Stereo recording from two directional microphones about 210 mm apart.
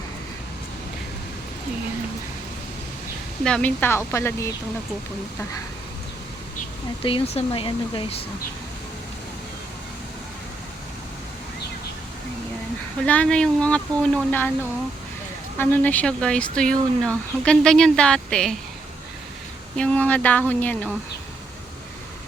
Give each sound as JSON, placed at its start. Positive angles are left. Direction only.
{"t": 3.4, "sound": "speech", "side_deg": 5}
{"t": 7.0, "sound": "speech", "side_deg": 25}
{"t": 13.1, "sound": "speech", "side_deg": 5}
{"t": 15.5, "sound": "speech", "side_deg": 10}
{"t": 19.7, "sound": "speech", "side_deg": 5}